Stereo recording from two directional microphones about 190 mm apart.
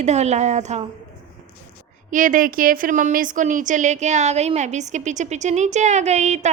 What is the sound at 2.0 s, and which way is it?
A woman's voice, 45° right (ahead or behind).